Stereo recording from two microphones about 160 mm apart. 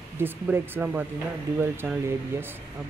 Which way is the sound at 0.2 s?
10° right (ahead or behind).